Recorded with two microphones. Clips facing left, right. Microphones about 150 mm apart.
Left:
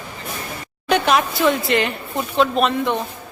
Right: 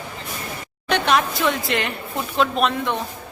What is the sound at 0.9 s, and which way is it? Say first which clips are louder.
A woman's voice: left 2 dB; 5° left (ahead or behind).